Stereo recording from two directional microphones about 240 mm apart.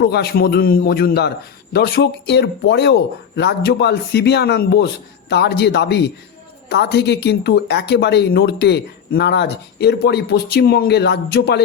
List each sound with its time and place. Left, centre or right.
0.0 s a man's voice: left